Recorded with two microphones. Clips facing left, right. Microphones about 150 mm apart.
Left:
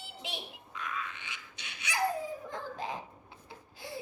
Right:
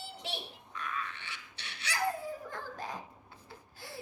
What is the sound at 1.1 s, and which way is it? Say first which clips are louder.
Filing: left 1 dB; 15° left (ahead or behind).